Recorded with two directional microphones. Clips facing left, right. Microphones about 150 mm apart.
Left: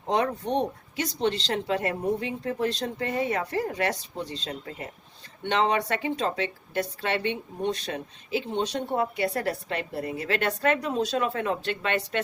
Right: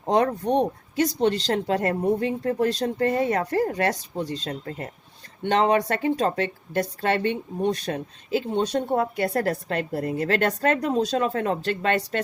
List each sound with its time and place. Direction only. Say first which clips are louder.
0.1 s speech: right 4 dB; 45° right (ahead or behind)